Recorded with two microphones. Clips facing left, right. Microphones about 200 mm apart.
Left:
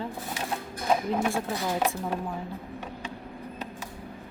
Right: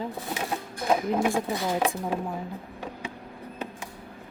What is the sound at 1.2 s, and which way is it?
Speech, 15° right (ahead or behind).